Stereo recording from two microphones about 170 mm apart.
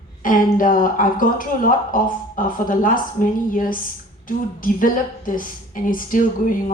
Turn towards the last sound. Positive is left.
turn(degrees=50)  # may be behind; listen again after turning